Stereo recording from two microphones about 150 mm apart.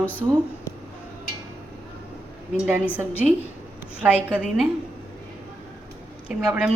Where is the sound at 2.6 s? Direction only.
10° right (ahead or behind).